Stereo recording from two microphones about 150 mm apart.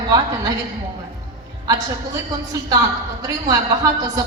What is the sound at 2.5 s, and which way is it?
A woman's voice, 25° right (ahead or behind).